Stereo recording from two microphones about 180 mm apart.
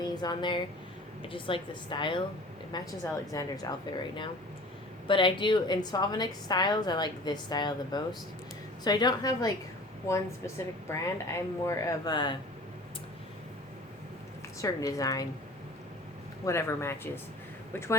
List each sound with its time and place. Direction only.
0.0 s a woman's voice: 25° left (ahead or behind)
5.0 s a woman's voice: 25° left (ahead or behind)
14.6 s a woman's voice: 20° left (ahead or behind)
16.5 s a woman's voice: 15° left (ahead or behind)